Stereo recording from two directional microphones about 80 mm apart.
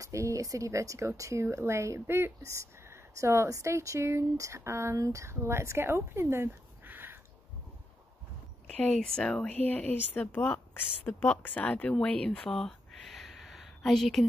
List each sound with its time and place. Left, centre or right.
0.0 s speech: right
8.6 s a woman's voice: centre